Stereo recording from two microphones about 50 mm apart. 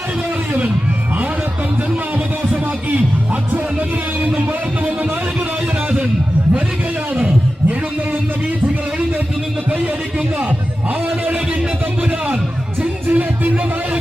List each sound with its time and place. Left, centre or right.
2.1 s a sound: right
3.5 s heart murmur: right
12.8 s music: right